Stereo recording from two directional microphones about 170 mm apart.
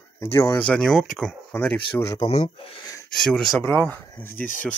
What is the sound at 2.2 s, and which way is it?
Speech, 35° left (ahead or behind).